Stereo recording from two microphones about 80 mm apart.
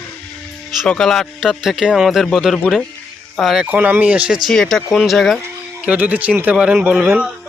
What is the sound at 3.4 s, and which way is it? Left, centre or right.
Speech, centre.